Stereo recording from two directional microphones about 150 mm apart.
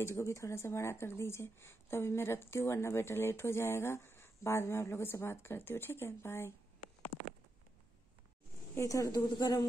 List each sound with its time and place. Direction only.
0.0 s speech: 20° left (ahead or behind)
7.1 s a sound: 40° left (ahead or behind)
8.7 s a woman's voice: 20° left (ahead or behind)